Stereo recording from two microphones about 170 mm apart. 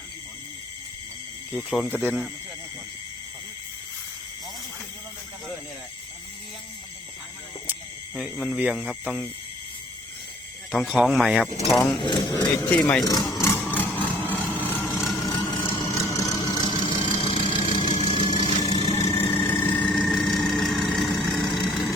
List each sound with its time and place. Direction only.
1.5 s speech: 5° left (ahead or behind)
1.9 s speech: 10° right (ahead or behind)
7.7 s speech: 5° right (ahead or behind)
10.7 s speech: 5° right (ahead or behind)
11.4 s speech: 35° left (ahead or behind)
11.7 s speech: 5° left (ahead or behind)
12.0 s speech: 25° left (ahead or behind)
12.7 s speech: 10° left (ahead or behind)
13.1 s a sound: 20° left (ahead or behind); by 15.1 s 5° left (ahead or behind)
15.8 s vehicle: 20° left (ahead or behind)
17.8 s engine: 45° left (ahead or behind)
18.2 s vehicle: 25° left (ahead or behind)
18.9 s vehicle: 40° left (ahead or behind)
19.6 s vehicle: 10° left (ahead or behind)